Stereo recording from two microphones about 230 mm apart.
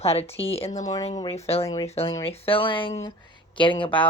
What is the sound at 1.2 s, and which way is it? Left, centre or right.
Speech, left.